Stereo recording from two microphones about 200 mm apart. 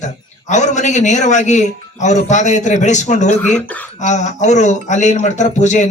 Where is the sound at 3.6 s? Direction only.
5° left (ahead or behind).